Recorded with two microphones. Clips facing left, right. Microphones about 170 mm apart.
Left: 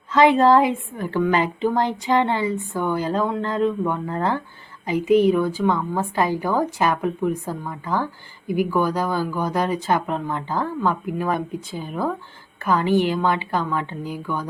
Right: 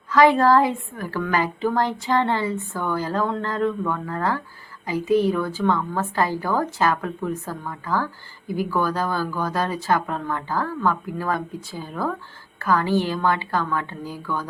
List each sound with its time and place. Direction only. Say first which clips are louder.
0.1 s a woman's voice: left 1 dB; 20° left (ahead or behind)